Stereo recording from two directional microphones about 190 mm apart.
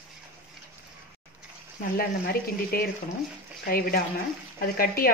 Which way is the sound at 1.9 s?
50° left (ahead or behind).